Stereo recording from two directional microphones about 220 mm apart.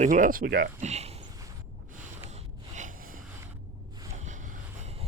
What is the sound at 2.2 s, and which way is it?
Rub, 30° right (ahead or behind).